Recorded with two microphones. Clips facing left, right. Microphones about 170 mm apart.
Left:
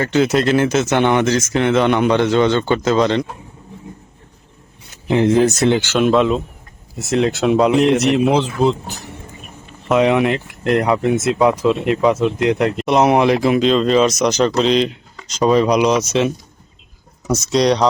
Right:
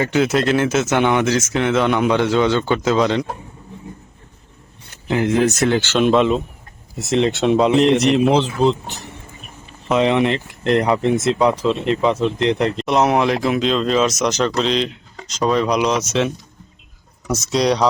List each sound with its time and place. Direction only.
0.1 s speech: centre (ahead or behind)
5.0 s speech: 25° left (ahead or behind)
5.7 s speech: 10° left (ahead or behind)
17.5 s speech: 5° right (ahead or behind)